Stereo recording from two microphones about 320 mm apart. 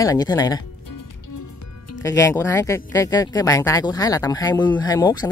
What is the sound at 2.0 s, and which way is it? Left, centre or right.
Speech, centre.